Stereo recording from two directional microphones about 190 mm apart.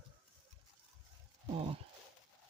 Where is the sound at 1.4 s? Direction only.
30° right (ahead or behind).